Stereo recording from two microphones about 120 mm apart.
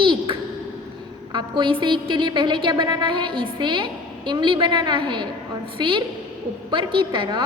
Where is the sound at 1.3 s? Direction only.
40° right (ahead or behind).